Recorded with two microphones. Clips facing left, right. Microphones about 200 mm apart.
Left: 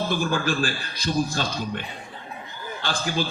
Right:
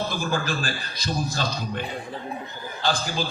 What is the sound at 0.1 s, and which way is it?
A man's voice, 40° right (ahead or behind).